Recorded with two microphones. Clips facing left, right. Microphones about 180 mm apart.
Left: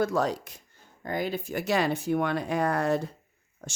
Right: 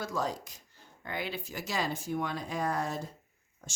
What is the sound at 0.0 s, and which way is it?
Speech, 65° left (ahead or behind).